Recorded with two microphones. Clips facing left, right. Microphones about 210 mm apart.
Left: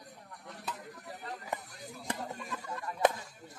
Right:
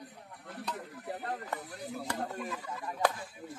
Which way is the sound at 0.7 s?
45° right (ahead or behind).